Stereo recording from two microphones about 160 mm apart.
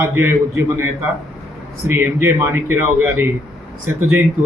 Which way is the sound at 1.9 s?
15° right (ahead or behind).